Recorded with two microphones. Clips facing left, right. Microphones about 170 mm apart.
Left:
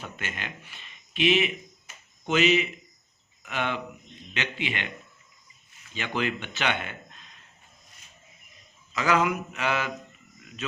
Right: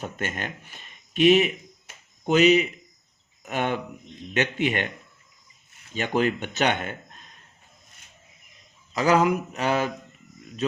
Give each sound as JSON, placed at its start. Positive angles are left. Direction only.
{"t": 0.0, "sound": "speech", "side_deg": -45}
{"t": 5.9, "sound": "speech", "side_deg": -45}
{"t": 8.9, "sound": "speech", "side_deg": -35}